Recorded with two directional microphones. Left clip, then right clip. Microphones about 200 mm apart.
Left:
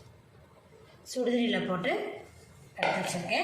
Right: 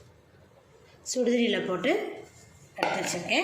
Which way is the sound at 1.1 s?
35° right (ahead or behind).